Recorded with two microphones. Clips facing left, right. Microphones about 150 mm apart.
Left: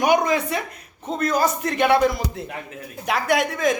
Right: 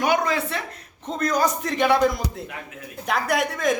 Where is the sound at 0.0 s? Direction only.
15° left (ahead or behind).